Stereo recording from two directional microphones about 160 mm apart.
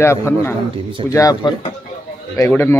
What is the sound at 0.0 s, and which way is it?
Speech, 15° left (ahead or behind).